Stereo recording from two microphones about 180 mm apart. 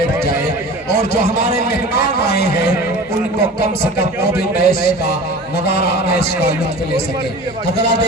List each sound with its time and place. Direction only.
0.9 s a sound: 65° left (ahead or behind)
4.4 s a man's voice: 60° left (ahead or behind)
7.8 s a man's voice: 65° left (ahead or behind)